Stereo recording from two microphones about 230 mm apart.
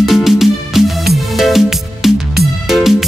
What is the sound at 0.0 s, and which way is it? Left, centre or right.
Music, centre.